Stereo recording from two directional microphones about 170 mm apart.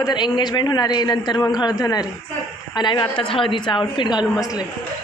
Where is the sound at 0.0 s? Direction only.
25° left (ahead or behind).